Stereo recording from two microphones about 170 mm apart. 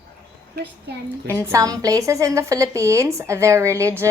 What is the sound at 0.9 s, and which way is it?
Speech, 80° right.